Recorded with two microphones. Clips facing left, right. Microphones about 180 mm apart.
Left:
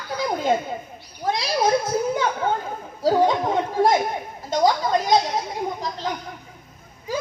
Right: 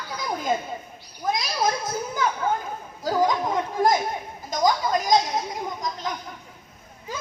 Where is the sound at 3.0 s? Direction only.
30° left (ahead or behind).